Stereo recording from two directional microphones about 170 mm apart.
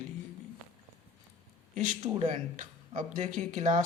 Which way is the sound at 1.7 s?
45° right (ahead or behind).